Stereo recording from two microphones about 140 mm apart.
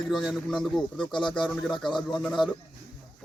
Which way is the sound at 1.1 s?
35° left (ahead or behind).